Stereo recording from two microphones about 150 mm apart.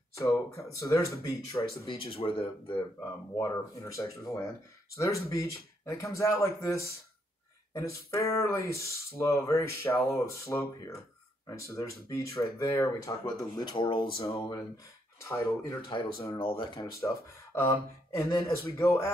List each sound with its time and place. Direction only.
0.1 s speech: 20° left (ahead or behind)
3.0 s speech: 25° left (ahead or behind)
8.1 s speech: 20° left (ahead or behind)
15.1 s speech: 20° left (ahead or behind)
16.3 s speech: 35° left (ahead or behind)
17.0 s speech: 20° left (ahead or behind)